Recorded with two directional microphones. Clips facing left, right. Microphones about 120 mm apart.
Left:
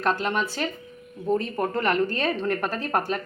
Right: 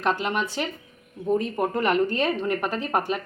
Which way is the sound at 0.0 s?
15° right (ahead or behind).